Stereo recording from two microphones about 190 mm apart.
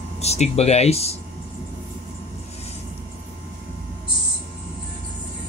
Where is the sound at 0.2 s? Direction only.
35° left (ahead or behind).